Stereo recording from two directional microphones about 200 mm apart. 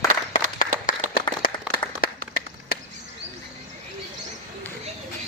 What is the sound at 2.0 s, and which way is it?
Clapping, 45° left (ahead or behind).